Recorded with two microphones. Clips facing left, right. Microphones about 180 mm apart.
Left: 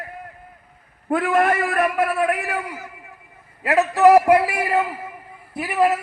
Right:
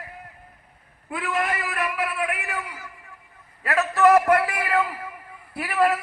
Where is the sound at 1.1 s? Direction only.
45° left (ahead or behind).